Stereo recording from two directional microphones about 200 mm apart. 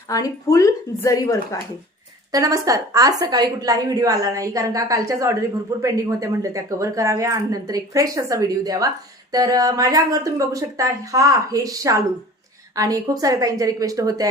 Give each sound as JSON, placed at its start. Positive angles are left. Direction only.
{"t": 0.1, "sound": "a woman's voice", "side_deg": 15}
{"t": 2.3, "sound": "speech", "side_deg": -15}